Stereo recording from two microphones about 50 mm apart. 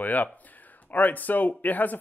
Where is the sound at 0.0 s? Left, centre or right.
Left.